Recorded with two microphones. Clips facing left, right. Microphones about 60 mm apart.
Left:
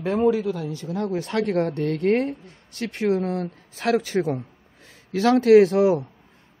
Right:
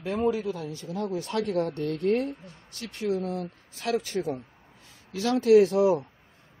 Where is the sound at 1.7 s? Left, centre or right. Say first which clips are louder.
Left 4 dB; left.